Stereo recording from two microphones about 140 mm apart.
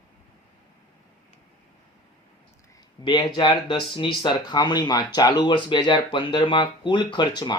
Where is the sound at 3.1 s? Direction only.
35° left (ahead or behind).